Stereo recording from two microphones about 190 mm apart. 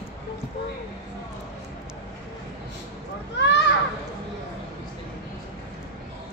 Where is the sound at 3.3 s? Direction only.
65° left (ahead or behind).